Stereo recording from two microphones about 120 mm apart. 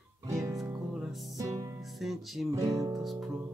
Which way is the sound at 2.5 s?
30° right (ahead or behind).